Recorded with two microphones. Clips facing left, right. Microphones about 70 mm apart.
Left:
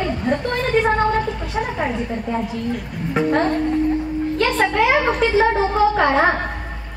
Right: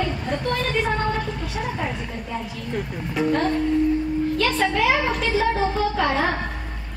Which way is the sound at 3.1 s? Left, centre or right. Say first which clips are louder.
Left 4 dB; left.